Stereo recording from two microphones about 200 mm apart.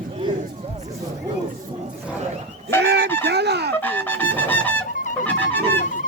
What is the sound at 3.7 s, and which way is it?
Music, 10° left (ahead or behind).